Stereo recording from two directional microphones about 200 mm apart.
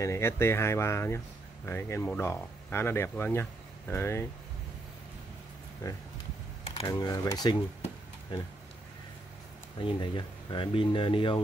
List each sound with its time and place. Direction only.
0.0 s speech: 15° left (ahead or behind)
6.7 s speech: 20° left (ahead or behind)
9.8 s speech: 25° left (ahead or behind)